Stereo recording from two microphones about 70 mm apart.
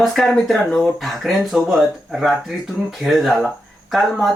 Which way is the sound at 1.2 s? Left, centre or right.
Centre.